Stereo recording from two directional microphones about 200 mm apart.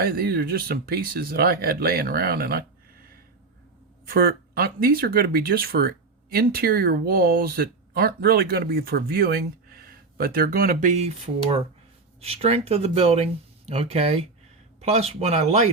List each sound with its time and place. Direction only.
0.0 s speech: 50° right (ahead or behind)
4.1 s speech: 50° right (ahead or behind); by 15.7 s 35° right (ahead or behind)